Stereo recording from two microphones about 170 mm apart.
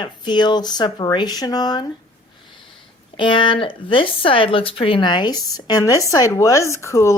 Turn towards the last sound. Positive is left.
turn(degrees=15)  # may be behind; listen again after turning